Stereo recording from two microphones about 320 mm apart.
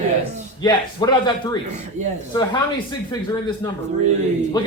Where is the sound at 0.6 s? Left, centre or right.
Centre.